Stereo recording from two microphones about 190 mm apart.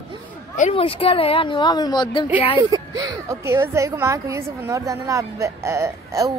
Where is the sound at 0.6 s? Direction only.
30° left (ahead or behind).